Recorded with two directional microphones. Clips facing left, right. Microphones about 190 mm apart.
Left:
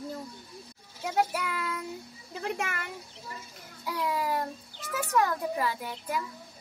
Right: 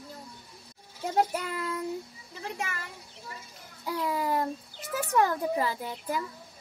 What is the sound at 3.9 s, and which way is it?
A child's voice, 35° right (ahead or behind).